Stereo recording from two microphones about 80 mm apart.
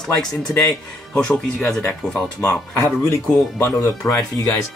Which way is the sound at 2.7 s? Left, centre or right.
Left.